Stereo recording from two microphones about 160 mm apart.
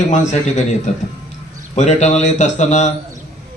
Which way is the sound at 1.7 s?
45° left (ahead or behind).